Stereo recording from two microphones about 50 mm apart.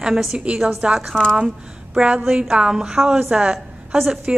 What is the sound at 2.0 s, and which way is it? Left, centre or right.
A woman's voice, right.